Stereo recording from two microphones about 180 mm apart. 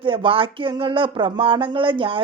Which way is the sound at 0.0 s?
30° right (ahead or behind).